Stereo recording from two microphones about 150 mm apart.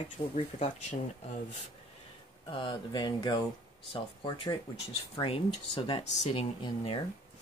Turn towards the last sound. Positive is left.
turn(degrees=35)  # may be behind; listen again after turning